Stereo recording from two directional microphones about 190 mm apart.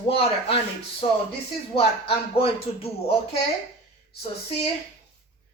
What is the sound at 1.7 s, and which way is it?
A woman's voice, 30° left (ahead or behind).